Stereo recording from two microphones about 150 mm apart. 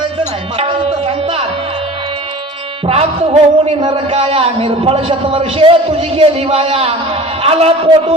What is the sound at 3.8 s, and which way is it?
A man's voice, 40° right (ahead or behind).